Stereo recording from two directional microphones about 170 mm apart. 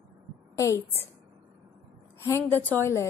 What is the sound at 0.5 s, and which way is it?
Speech, 15° left (ahead or behind).